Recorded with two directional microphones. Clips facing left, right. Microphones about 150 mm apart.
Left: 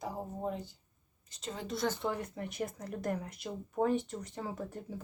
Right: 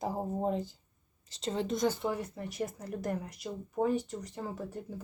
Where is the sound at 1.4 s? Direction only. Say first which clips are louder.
Right 5 dB; 30° right (ahead or behind).